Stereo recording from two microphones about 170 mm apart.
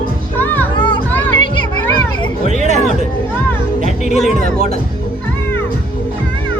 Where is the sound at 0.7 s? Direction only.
30° left (ahead or behind).